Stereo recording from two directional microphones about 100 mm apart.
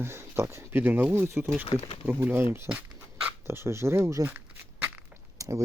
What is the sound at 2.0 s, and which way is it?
Speech, 20° right (ahead or behind).